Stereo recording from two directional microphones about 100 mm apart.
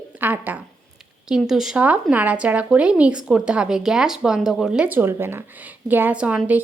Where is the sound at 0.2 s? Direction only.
15° right (ahead or behind).